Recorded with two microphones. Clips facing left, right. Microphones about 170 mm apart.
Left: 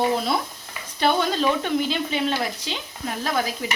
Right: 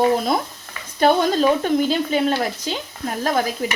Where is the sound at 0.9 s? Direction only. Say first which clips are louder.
Right 5 dB; 45° right (ahead or behind).